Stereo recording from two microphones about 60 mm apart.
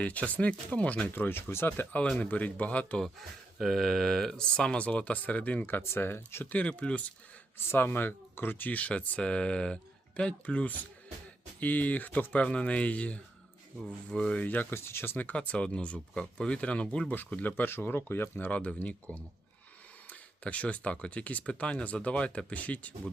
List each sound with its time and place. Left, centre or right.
0.0 s speech: left
1.1 s speech: left
2.3 s speech: left
3.0 s speech: centre
4.4 s speech: centre
5.9 s speech: left
6.5 s speech: left
7.7 s speech: left; by 14.4 s centre
14.4 s speech: left
14.7 s speech: left
15.2 s speech: left
16.1 s speech: centre
17.5 s speech: left
20.1 s speech: left